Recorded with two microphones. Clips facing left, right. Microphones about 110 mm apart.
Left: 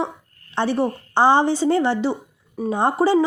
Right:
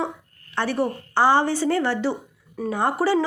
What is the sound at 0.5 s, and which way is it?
Speech, 20° left (ahead or behind).